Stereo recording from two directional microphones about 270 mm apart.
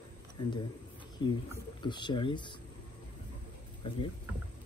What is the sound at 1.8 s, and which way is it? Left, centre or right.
Speech, centre.